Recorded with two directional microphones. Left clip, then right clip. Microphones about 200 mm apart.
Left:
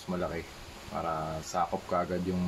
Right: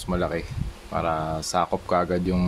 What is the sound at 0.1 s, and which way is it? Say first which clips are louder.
Speech: right 8 dB; 55° right (ahead or behind).